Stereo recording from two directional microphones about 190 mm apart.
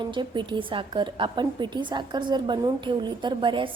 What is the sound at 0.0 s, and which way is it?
A woman's voice, 25° right (ahead or behind).